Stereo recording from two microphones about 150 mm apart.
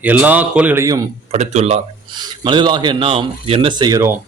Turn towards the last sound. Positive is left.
turn(degrees=-20)  # may be behind; listen again after turning